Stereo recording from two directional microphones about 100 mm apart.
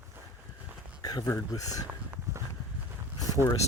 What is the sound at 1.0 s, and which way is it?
Speech, 40° left (ahead or behind).